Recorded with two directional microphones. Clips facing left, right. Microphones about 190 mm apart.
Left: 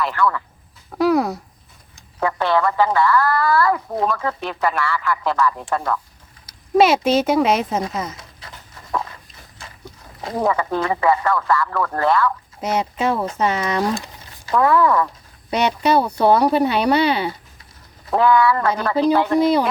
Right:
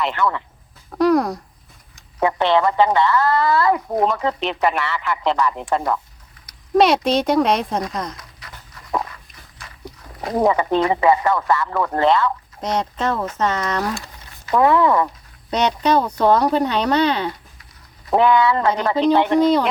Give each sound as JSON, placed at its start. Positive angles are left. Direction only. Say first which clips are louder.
{"t": 0.0, "sound": "a woman's voice", "louder": "left 1 dB", "side_deg": -20}
{"t": 0.9, "sound": "speech", "louder": "right 1 dB", "side_deg": 5}
{"t": 2.2, "sound": "a woman's voice", "louder": "right 2 dB", "side_deg": -20}
{"t": 6.7, "sound": "speech", "louder": "left 1 dB", "side_deg": 5}
{"t": 9.6, "sound": "walk", "louder": "left 2 dB", "side_deg": 25}
{"t": 10.3, "sound": "a woman's voice", "louder": "right 3 dB", "side_deg": -20}
{"t": 12.5, "sound": "speech", "louder": "left 1 dB", "side_deg": 5}
{"t": 13.8, "sound": "a sound", "louder": "left 3 dB", "side_deg": 20}
{"t": 14.5, "sound": "a woman's voice", "louder": "right 1 dB", "side_deg": -20}
{"t": 15.4, "sound": "speech", "louder": "even", "side_deg": 10}
{"t": 18.1, "sound": "a woman's voice", "louder": "even", "side_deg": -20}
{"t": 19.4, "sound": "speech", "louder": "right 1 dB", "side_deg": 10}